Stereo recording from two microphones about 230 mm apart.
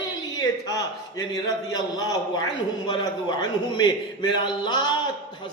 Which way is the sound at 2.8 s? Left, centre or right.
Centre.